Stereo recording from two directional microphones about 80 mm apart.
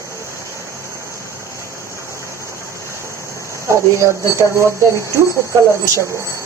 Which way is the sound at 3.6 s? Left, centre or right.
Right.